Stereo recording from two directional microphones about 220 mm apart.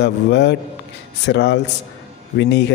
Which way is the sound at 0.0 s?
50° left (ahead or behind).